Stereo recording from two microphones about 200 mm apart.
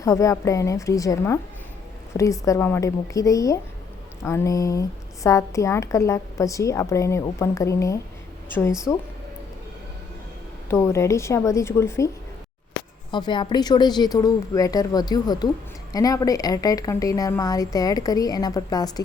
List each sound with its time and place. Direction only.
0.0 s a woman's voice: 15° left (ahead or behind)
10.7 s a woman's voice: 15° left (ahead or behind)